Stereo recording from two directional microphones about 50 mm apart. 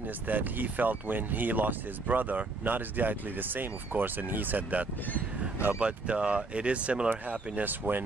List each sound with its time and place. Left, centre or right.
0.3 s speech: right